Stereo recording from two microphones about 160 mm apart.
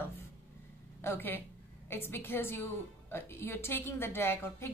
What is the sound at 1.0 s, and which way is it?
A woman's voice, 10° left (ahead or behind).